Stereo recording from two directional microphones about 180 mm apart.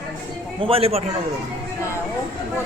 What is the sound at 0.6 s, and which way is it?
Speech, 30° right (ahead or behind).